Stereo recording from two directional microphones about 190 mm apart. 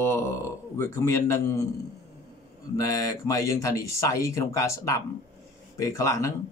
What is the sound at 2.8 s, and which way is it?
Speech, 20° left (ahead or behind).